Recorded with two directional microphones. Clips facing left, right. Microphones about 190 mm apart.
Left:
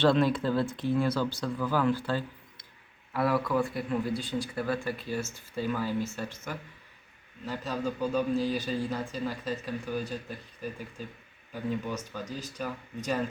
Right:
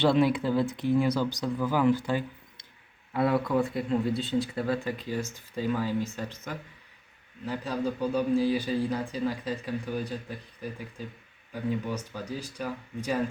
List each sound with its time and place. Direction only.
0.0 s speech: 10° right (ahead or behind)
11.9 s speech: 10° right (ahead or behind)